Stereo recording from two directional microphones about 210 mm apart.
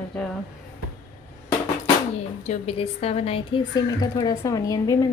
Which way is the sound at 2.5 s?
30° left (ahead or behind).